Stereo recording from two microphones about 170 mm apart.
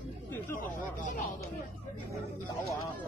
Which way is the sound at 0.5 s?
50° left (ahead or behind).